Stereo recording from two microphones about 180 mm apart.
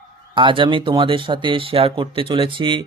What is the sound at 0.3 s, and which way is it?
Speech, 30° right (ahead or behind).